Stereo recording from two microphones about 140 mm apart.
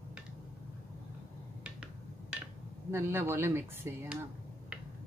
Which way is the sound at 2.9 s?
15° right (ahead or behind).